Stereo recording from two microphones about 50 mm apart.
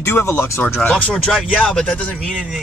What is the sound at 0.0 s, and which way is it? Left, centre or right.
Speech, left.